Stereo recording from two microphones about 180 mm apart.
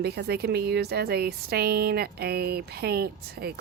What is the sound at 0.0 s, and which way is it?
Speech, 60° right (ahead or behind).